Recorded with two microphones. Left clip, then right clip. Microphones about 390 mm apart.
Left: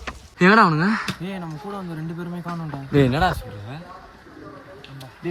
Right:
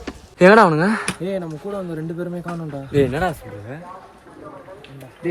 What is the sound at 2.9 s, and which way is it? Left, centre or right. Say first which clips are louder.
Speech: even; centre.